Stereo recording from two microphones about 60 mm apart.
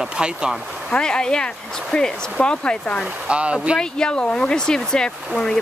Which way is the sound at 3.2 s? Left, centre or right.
Centre.